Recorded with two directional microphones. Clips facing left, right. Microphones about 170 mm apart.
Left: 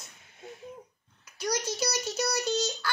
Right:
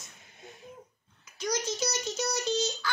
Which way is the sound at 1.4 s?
65° left (ahead or behind).